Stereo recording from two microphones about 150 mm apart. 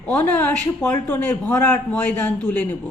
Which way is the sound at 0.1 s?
10° left (ahead or behind).